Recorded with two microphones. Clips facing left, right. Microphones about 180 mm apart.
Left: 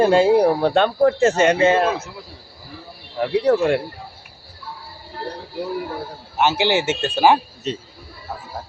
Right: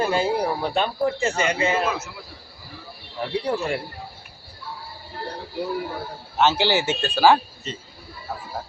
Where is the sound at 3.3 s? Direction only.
85° left.